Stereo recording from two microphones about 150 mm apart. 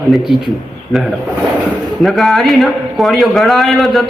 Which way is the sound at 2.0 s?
Centre (ahead or behind).